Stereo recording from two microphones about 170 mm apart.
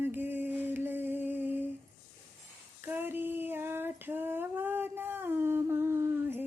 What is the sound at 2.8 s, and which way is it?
Female singing, 10° right (ahead or behind).